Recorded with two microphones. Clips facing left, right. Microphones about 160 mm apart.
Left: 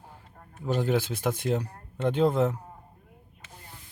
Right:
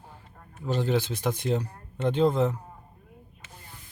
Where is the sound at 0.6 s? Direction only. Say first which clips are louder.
Even; 10° left (ahead or behind).